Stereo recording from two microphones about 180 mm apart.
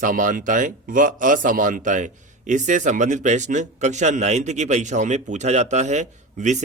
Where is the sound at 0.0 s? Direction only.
50° right (ahead or behind).